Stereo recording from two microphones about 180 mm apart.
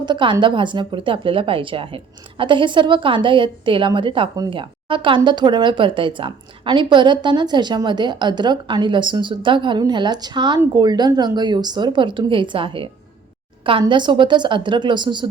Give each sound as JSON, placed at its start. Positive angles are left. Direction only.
{"t": 0.0, "sound": "a woman's voice", "side_deg": -25}